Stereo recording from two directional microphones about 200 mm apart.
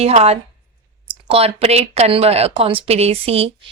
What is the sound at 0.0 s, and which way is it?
A woman's voice, 30° right (ahead or behind).